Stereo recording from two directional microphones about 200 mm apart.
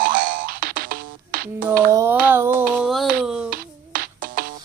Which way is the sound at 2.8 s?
Centre (ahead or behind).